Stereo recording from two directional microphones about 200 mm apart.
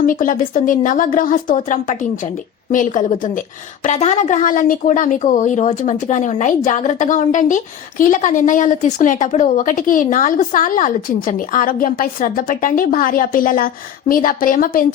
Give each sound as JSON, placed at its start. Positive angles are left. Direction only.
{"t": 0.0, "sound": "a woman's voice", "side_deg": 45}